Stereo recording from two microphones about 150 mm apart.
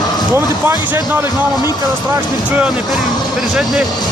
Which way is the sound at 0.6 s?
15° right (ahead or behind).